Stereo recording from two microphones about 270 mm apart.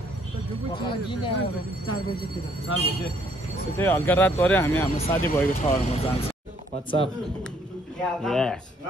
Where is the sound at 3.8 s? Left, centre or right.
Centre.